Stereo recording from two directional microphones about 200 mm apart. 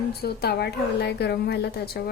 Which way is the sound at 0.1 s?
50° left (ahead or behind).